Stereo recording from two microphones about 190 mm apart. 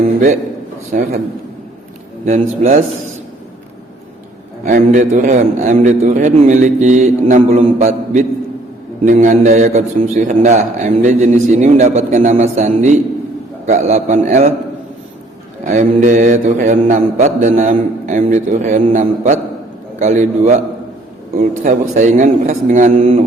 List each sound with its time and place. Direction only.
0.9 s a man's voice: 45° right (ahead or behind)
2.2 s a man's voice: 40° right (ahead or behind)
4.6 s a man's voice: 40° right (ahead or behind)
15.6 s a man's voice: 45° right (ahead or behind)